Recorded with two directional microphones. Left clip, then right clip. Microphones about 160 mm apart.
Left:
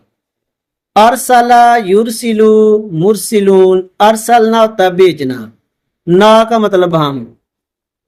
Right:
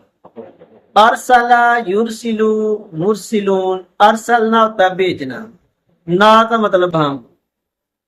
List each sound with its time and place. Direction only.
0.9 s speech: 70° left (ahead or behind)